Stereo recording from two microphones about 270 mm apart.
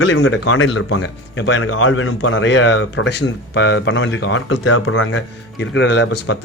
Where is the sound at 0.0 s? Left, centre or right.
Left.